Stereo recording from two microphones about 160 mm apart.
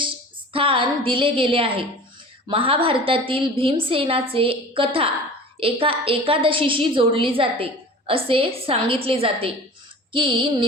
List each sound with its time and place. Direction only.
0.5 s a woman's voice: 35° right (ahead or behind)